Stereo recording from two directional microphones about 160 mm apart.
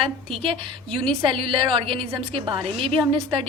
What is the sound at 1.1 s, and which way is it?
A woman's voice, 35° right (ahead or behind).